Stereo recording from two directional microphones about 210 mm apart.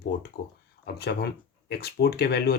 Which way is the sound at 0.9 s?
50° left (ahead or behind).